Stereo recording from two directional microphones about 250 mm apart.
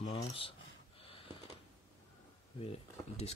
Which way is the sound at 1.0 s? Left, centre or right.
Left.